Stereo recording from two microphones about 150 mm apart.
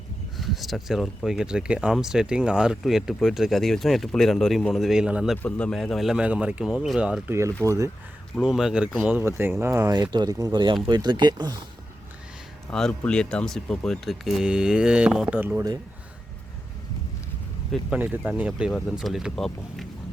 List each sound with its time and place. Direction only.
0.3 s speech: centre (ahead or behind)
5.4 s speech: 10° left (ahead or behind)
7.6 s speech: 20° right (ahead or behind)
8.4 s speech: centre (ahead or behind); by 11.6 s 30° right (ahead or behind)
12.7 s speech: 5° left (ahead or behind); by 15.6 s 10° right (ahead or behind)
17.9 s speech: 10° right (ahead or behind)
18.7 s speech: centre (ahead or behind)